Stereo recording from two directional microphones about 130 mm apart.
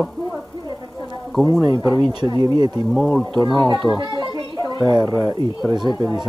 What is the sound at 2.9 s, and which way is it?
Speech, centre (ahead or behind).